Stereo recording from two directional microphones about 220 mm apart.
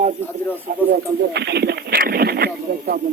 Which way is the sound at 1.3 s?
50° right (ahead or behind).